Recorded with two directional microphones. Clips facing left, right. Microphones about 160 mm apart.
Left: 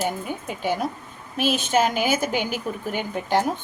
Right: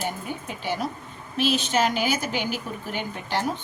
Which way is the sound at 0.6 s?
45° left (ahead or behind).